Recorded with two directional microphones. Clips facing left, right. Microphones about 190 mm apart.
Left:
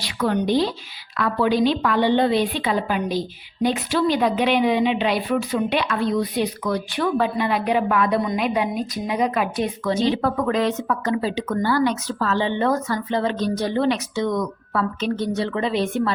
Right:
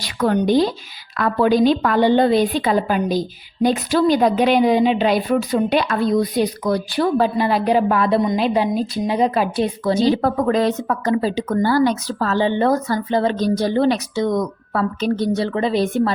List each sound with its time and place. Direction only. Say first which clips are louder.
0.0 s a woman's voice: right 4 dB; 45° right (ahead or behind)